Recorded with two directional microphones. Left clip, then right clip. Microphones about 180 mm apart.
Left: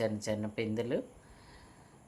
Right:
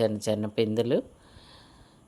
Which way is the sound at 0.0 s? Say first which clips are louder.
Right 7 dB; 45° right (ahead or behind).